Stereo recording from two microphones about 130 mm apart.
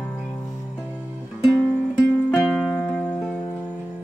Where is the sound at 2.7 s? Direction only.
10° left (ahead or behind).